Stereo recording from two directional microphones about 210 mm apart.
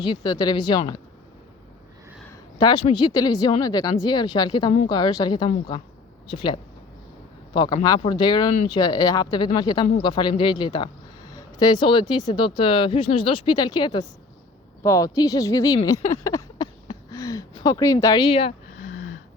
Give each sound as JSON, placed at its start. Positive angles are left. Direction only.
{"t": 0.0, "sound": "speech", "side_deg": 20}
{"t": 2.6, "sound": "speech", "side_deg": 20}